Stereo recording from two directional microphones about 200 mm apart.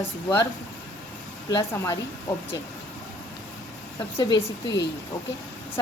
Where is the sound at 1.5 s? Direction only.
15° left (ahead or behind).